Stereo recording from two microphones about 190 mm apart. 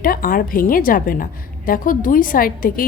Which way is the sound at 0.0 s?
50° left (ahead or behind).